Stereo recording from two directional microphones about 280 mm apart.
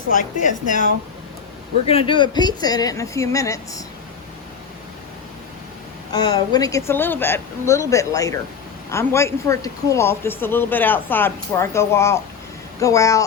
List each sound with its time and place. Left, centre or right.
0.1 s a woman's voice: left
1.9 s speech: centre
6.1 s speech: centre